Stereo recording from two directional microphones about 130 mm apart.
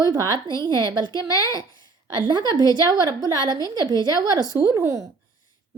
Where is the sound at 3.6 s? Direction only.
25° left (ahead or behind).